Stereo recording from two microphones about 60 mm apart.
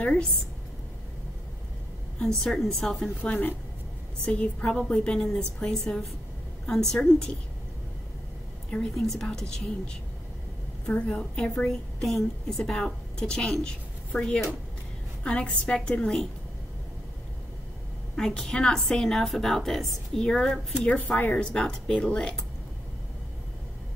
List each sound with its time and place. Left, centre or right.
2.1 s a woman's voice: centre
3.2 s a woman's voice: left; by 7.3 s centre
8.9 s a woman's voice: centre
18.1 s a woman's voice: centre
20.8 s a woman's voice: left